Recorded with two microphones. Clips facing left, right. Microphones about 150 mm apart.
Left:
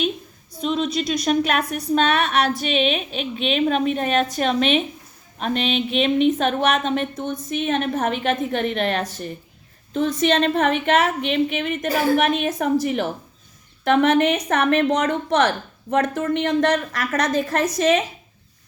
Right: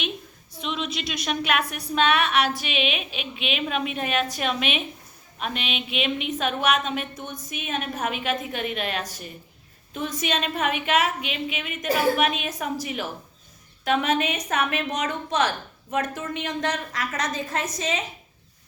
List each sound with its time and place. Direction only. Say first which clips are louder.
0.6 s a woman's voice: left 8 dB; 40° left (ahead or behind); by 18.0 s 70° left (ahead or behind)